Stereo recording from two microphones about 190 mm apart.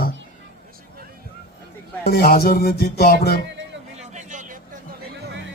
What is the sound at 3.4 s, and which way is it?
Music, 70° right (ahead or behind).